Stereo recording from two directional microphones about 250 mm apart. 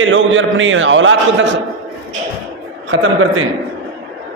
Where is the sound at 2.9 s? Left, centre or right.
Right.